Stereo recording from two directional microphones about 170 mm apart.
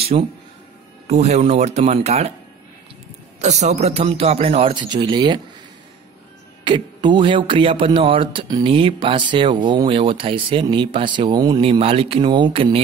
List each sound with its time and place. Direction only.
0.0 s a man's voice: 35° right (ahead or behind)
3.3 s a man's voice: 40° right (ahead or behind); by 5.4 s 25° right (ahead or behind)
6.6 s speech: 25° right (ahead or behind)